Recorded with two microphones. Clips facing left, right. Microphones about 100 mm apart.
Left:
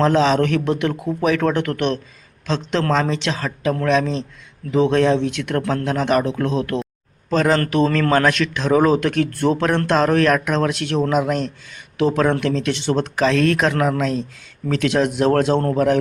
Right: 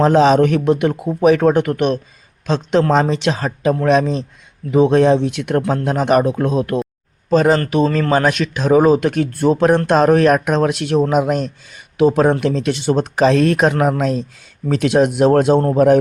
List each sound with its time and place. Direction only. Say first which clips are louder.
0.2 s speech: right 5 dB; 15° right (ahead or behind)